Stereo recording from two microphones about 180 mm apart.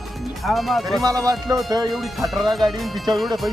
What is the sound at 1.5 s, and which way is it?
Speech, 15° right (ahead or behind).